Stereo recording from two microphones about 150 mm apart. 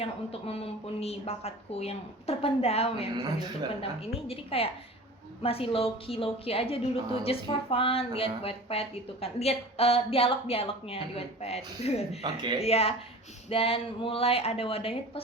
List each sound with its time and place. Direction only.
0.0 s a woman's voice: 40° left (ahead or behind)
12.2 s speech: 30° right (ahead or behind)
12.5 s a woman's voice: 40° left (ahead or behind)